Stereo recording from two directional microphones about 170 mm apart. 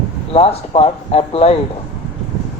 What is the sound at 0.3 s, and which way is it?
Speech, 35° left (ahead or behind).